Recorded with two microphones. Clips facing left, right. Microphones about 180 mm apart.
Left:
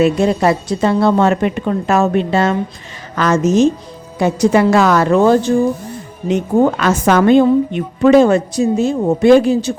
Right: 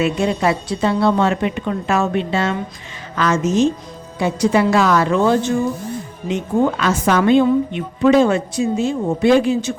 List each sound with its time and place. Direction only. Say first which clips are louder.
0.0 s a woman's voice: left 5 dB; 40° left (ahead or behind)